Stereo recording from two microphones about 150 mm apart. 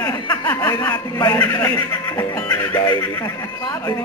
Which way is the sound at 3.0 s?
25° left (ahead or behind).